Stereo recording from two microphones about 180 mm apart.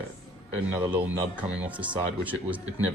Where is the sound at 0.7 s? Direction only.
10° right (ahead or behind).